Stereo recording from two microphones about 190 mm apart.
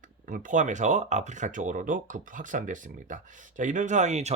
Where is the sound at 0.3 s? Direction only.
45° right (ahead or behind).